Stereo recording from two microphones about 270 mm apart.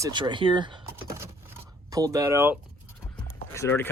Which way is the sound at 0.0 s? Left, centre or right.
Centre.